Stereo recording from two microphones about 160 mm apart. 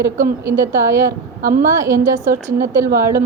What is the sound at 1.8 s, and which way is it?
A woman's voice, 20° right (ahead or behind).